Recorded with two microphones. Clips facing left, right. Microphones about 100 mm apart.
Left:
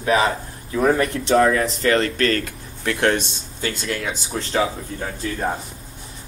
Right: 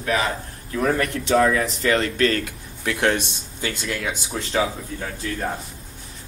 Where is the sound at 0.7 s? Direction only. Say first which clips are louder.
Left 3 dB; 15° left (ahead or behind).